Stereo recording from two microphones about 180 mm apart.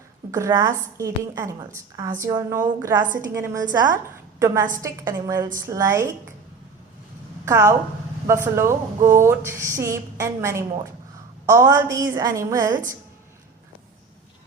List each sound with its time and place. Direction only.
0.3 s a woman's voice: 15° right (ahead or behind)
7.4 s a woman's voice: 15° right (ahead or behind)